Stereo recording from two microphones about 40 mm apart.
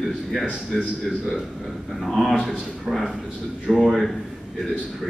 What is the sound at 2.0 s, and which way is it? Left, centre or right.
A man's voice, centre.